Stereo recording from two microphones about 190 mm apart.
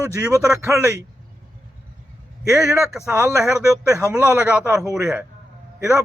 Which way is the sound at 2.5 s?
15° right (ahead or behind).